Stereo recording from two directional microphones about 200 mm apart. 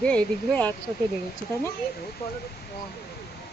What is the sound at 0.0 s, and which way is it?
Speech, 5° left (ahead or behind).